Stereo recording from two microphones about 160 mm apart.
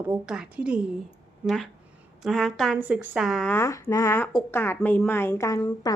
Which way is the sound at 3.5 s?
15° left (ahead or behind).